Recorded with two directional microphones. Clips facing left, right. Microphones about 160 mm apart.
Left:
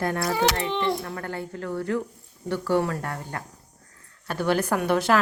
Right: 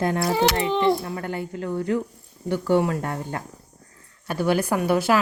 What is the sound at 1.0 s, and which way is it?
Speech, 15° right (ahead or behind).